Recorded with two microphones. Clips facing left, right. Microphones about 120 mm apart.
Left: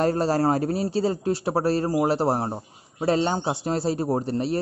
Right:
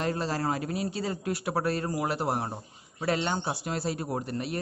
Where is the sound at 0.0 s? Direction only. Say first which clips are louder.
Left 8 dB; 40° left (ahead or behind).